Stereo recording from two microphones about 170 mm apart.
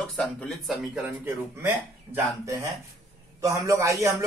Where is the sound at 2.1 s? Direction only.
15° right (ahead or behind).